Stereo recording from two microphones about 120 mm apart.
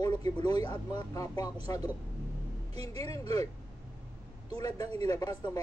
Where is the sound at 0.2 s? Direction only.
35° left (ahead or behind).